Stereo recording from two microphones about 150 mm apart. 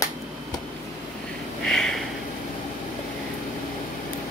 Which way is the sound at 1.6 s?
5° left (ahead or behind).